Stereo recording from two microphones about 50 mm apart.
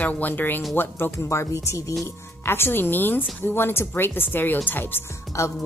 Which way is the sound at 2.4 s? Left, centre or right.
Left.